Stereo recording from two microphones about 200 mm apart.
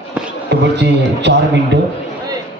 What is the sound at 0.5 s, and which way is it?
A man's voice, 60° right (ahead or behind).